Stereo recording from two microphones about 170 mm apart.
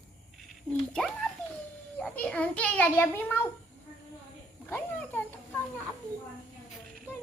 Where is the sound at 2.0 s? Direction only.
5° left (ahead or behind).